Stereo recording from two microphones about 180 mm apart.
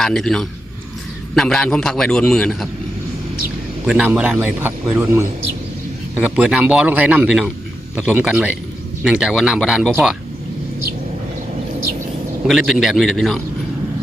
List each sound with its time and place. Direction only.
0.0 s a man's voice: 5° left (ahead or behind)
3.8 s a man's voice: 5° right (ahead or behind)
6.2 s a man's voice: 5° right (ahead or behind)
12.5 s a man's voice: centre (ahead or behind)